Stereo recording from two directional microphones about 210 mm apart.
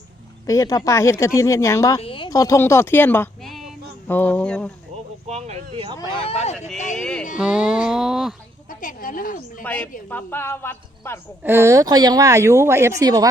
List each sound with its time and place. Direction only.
0.4 s speech: 15° left (ahead or behind)
2.0 s speech: 25° left (ahead or behind); by 4.7 s 5° left (ahead or behind)
5.3 s speech: 30° right (ahead or behind)
6.9 s speech: 5° left (ahead or behind)
8.7 s a woman's voice: 40° left (ahead or behind)
9.6 s speech: 5° left (ahead or behind)
11.4 s speech: 10° right (ahead or behind)